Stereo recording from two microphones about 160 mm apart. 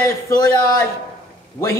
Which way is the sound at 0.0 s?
20° left (ahead or behind).